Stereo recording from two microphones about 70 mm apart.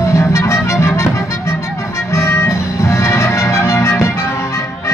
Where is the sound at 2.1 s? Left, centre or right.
Left.